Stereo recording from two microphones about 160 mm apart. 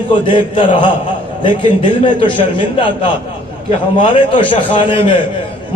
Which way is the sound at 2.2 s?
30° left (ahead or behind).